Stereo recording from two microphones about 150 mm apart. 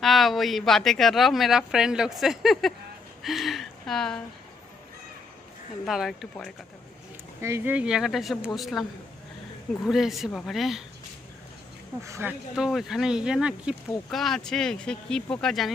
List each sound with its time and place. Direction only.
0.0 s a woman's voice: centre (ahead or behind)
5.8 s a woman's voice: centre (ahead or behind)
7.4 s a woman's voice: 15° right (ahead or behind)
12.0 s speech: 20° right (ahead or behind)
12.5 s a woman's voice: 5° right (ahead or behind)